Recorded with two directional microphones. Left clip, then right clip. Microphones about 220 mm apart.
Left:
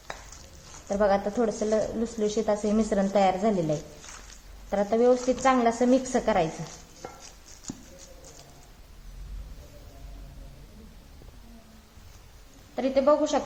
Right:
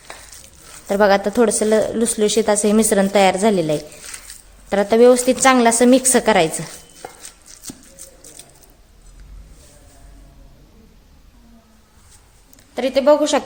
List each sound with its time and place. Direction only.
0.9 s a woman's voice: 50° right (ahead or behind)
4.7 s a woman's voice: 50° right (ahead or behind)
12.7 s a woman's voice: 50° right (ahead or behind)